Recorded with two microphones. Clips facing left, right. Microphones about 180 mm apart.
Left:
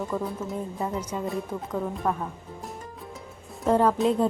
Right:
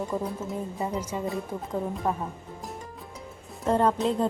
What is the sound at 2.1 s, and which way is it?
Speech, 20° right (ahead or behind).